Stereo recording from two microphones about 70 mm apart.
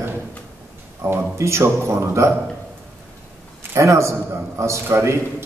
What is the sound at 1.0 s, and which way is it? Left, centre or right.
A man's voice, right.